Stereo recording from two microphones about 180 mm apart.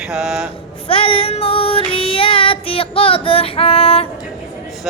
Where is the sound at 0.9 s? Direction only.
30° left (ahead or behind).